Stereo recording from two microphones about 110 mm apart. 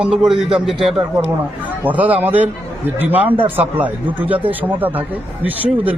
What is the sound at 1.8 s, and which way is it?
A man's voice, 15° right (ahead or behind).